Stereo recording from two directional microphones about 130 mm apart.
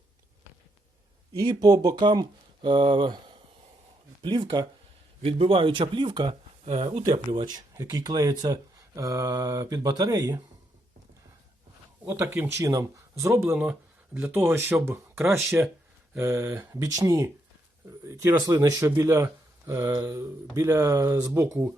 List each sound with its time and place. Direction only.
1.3 s speech: 30° right (ahead or behind)
7.3 s speech: 35° right (ahead or behind)
12.0 s speech: 20° right (ahead or behind)